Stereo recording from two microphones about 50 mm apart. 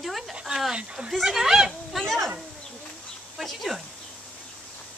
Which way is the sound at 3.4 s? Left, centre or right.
Centre.